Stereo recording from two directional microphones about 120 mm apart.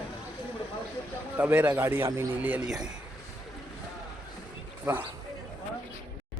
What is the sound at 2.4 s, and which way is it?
Speech, 15° right (ahead or behind).